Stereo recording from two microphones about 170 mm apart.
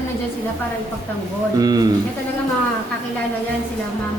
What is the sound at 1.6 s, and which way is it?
Speech, 25° right (ahead or behind).